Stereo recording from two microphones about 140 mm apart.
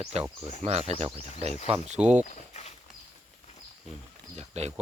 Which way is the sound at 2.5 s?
55° left (ahead or behind).